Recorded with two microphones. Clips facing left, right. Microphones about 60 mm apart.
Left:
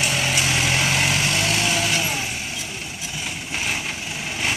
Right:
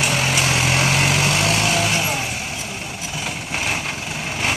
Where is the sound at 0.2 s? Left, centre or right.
Right.